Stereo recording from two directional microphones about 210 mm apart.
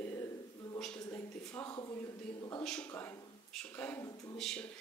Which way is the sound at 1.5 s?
15° left (ahead or behind).